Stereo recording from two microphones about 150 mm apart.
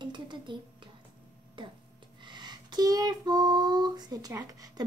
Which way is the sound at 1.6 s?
35° right (ahead or behind).